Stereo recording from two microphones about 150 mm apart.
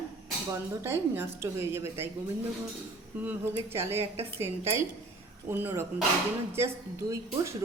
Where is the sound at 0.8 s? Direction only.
15° right (ahead or behind).